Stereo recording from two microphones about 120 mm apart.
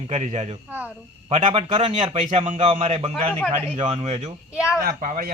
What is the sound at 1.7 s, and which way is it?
A man's voice, 55° right (ahead or behind).